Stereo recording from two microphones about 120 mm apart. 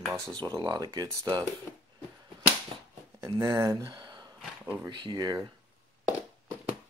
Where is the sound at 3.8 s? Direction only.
35° right (ahead or behind).